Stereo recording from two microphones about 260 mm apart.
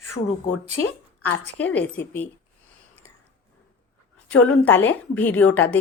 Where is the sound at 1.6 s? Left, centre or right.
Centre.